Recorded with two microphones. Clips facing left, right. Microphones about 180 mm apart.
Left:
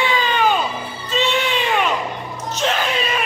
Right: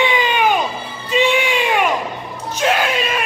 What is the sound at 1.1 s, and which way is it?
Music, 10° right (ahead or behind).